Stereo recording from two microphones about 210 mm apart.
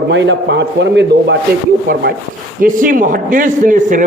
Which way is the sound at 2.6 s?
40° right (ahead or behind).